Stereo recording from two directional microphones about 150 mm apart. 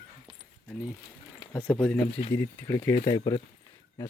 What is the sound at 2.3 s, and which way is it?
Speech, 20° left (ahead or behind).